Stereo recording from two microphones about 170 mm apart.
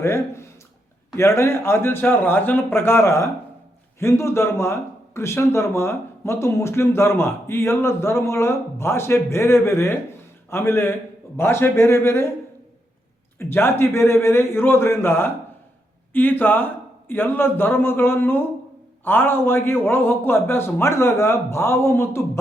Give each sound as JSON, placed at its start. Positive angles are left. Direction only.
{"t": 0.0, "sound": "speech", "side_deg": 15}
{"t": 13.4, "sound": "speech", "side_deg": 15}